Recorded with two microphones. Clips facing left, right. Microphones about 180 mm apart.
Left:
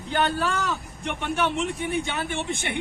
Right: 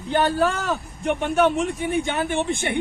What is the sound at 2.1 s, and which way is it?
Speech, 55° right (ahead or behind).